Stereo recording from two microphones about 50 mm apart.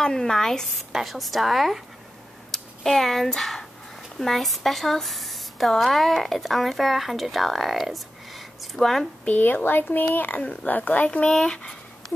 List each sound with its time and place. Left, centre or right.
0.0 s speech: centre
0.9 s speech: centre
9.2 s speech: left
11.1 s speech: centre